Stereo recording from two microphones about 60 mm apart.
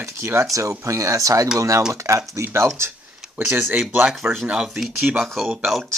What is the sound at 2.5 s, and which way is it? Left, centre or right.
Speech, right.